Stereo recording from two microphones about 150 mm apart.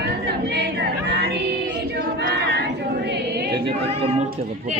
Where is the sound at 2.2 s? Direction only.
90° right.